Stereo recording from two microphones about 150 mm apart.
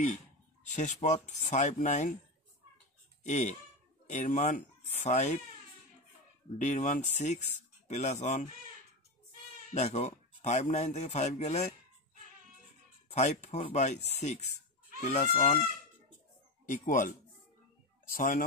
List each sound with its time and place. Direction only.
0.7 s speech: 50° left (ahead or behind)
3.3 s speech: 50° left (ahead or behind)
6.6 s speech: 50° left (ahead or behind)
9.8 s speech: 50° left (ahead or behind)
13.1 s speech: 50° left (ahead or behind)
16.6 s speech: 60° left (ahead or behind)